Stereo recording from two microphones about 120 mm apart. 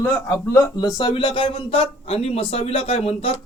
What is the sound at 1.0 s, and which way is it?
A man's voice, 40° left (ahead or behind).